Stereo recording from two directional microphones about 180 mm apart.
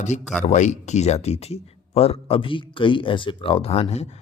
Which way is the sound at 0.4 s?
40° left (ahead or behind).